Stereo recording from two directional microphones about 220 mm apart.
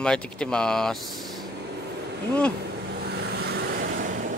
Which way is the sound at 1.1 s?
Centre (ahead or behind).